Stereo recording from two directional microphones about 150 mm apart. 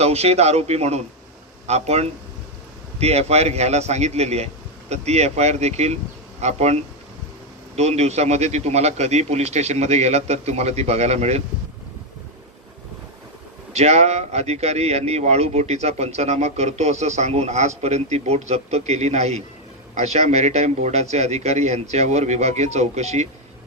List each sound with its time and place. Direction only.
0.0 s a man's voice: 45° right (ahead or behind)
13.7 s a man's voice: 45° right (ahead or behind)